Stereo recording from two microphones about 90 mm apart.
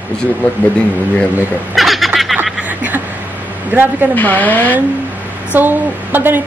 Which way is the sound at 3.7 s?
20° right (ahead or behind).